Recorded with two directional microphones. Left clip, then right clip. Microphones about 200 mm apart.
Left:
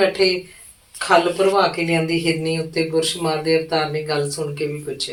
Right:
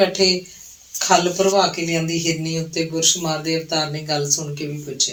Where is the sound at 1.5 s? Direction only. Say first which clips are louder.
Left 1 dB; 40° right (ahead or behind).